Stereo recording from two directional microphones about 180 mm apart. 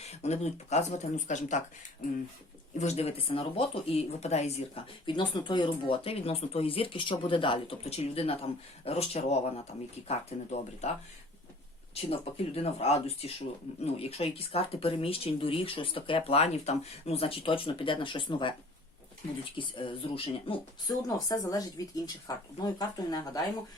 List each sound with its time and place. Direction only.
0.0 s speech: 35° left (ahead or behind)
2.7 s speech: 35° left (ahead or behind)
5.0 s speech: 25° left (ahead or behind)
11.9 s speech: 30° left (ahead or behind)
19.5 s speech: 30° left (ahead or behind)